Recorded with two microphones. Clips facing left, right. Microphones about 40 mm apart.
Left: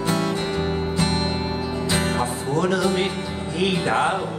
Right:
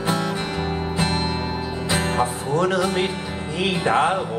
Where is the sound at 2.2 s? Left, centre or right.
Right.